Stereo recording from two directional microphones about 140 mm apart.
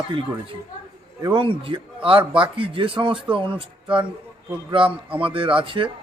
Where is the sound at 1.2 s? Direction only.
35° right (ahead or behind).